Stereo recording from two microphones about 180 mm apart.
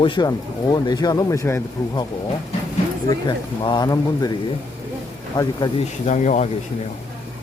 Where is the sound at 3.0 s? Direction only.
25° left (ahead or behind).